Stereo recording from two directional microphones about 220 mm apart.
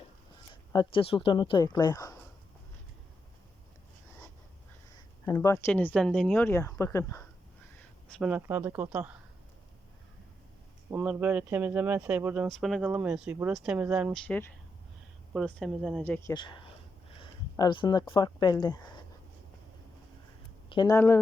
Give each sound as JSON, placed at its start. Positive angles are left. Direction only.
{"t": 0.5, "sound": "speech", "side_deg": 20}
{"t": 5.2, "sound": "speech", "side_deg": 15}
{"t": 6.3, "sound": "speech", "side_deg": 10}
{"t": 8.0, "sound": "speech", "side_deg": -5}
{"t": 10.9, "sound": "speech", "side_deg": -5}
{"t": 16.3, "sound": "speech", "side_deg": 20}
{"t": 20.7, "sound": "speech", "side_deg": 20}